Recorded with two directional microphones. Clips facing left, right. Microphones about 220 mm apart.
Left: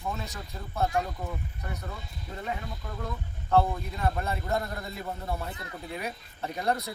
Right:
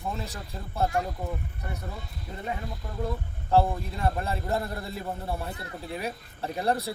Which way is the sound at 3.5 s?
30° right (ahead or behind).